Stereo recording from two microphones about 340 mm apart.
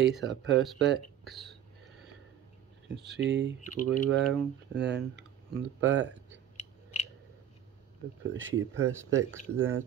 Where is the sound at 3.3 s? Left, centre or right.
Right.